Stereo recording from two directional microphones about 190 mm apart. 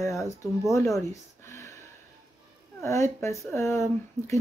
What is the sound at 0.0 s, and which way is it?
Speech, 15° left (ahead or behind).